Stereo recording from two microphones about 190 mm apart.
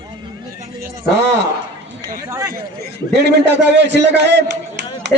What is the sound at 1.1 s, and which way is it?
Speech, 65° right (ahead or behind).